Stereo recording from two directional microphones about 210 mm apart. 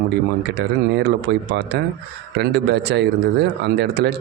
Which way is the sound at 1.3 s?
55° right (ahead or behind).